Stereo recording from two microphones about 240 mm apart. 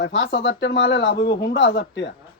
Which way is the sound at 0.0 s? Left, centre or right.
Left.